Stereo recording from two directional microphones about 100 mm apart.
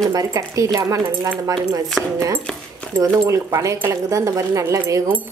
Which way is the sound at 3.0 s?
30° right (ahead or behind).